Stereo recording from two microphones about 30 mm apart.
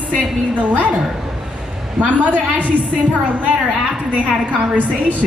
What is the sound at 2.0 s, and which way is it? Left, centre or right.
A woman's voice, right.